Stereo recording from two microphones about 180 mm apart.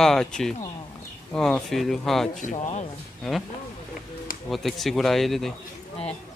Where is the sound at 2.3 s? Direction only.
45° left (ahead or behind).